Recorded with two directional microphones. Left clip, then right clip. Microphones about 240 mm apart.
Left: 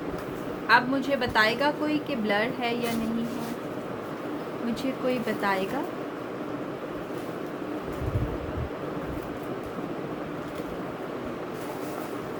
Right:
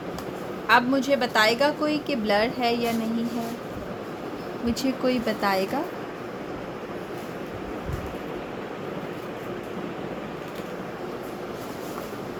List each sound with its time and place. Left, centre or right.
0.7 s a woman's voice: right
4.7 s a woman's voice: right